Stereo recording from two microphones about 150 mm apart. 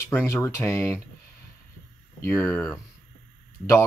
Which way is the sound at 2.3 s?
15° left (ahead or behind).